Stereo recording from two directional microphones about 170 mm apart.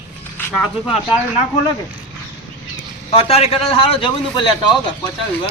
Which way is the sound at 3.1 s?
35° left (ahead or behind).